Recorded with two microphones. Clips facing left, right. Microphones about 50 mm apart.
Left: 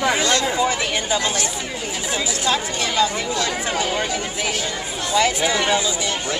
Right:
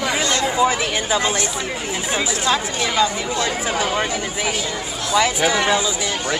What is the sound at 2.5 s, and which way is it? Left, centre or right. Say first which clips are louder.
Speech: even; centre.